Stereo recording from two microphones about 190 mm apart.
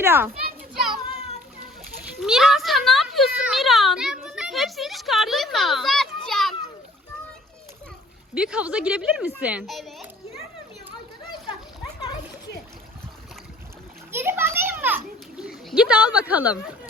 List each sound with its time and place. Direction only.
0.0 s a child's voice: 10° right (ahead or behind)
0.7 s children playing: centre (ahead or behind)
2.2 s speech: centre (ahead or behind)
8.4 s a woman's voice: 5° right (ahead or behind)
14.1 s children playing: 10° right (ahead or behind)